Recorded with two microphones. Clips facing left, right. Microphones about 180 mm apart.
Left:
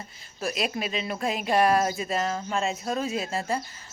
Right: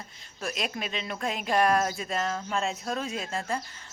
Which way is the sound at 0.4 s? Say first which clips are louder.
Left 4 dB; 5° left (ahead or behind).